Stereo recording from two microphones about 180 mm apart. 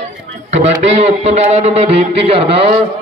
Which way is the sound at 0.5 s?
35° right (ahead or behind).